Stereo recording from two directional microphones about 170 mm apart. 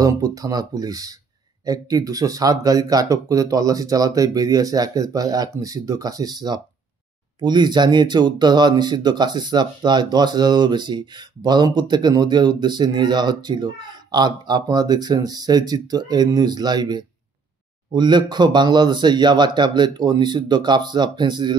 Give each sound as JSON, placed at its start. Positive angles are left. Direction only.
{"t": 0.0, "sound": "speech", "side_deg": -20}